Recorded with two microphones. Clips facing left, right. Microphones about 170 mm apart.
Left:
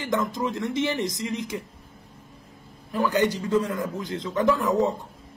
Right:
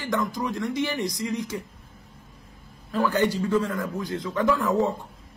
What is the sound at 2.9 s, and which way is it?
A woman's voice, 15° left (ahead or behind).